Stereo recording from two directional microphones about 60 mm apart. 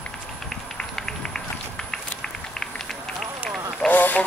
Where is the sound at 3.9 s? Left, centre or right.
Left.